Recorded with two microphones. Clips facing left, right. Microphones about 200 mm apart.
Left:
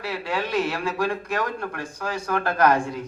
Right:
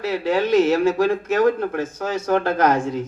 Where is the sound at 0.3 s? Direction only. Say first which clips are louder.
Right 9 dB; 20° right (ahead or behind).